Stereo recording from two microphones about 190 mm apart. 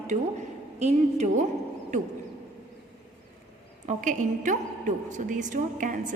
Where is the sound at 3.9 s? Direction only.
45° right (ahead or behind).